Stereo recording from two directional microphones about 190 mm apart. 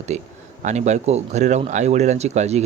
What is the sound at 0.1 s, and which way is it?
Speech, 35° right (ahead or behind).